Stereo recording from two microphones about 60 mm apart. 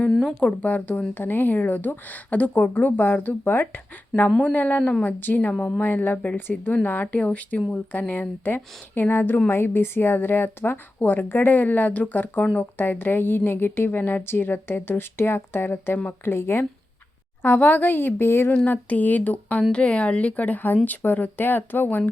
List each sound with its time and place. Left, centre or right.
0.1 s speech: centre
0.3 s a woman's voice: left
4.3 s speech: centre
4.5 s a woman's voice: left
17.4 s a woman's voice: left
18.5 s a woman's voice: left